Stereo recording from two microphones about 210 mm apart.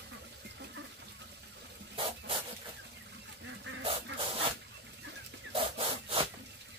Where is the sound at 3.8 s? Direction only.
25° right (ahead or behind).